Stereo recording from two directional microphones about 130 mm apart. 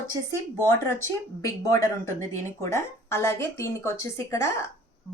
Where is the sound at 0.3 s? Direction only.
20° left (ahead or behind).